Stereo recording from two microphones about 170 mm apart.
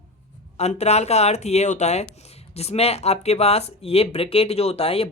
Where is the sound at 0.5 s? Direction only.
40° left (ahead or behind).